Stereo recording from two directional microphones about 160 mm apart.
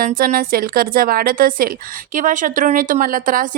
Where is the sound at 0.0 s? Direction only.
60° right (ahead or behind).